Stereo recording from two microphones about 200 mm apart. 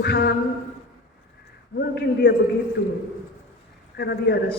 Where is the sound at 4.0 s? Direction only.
55° left (ahead or behind).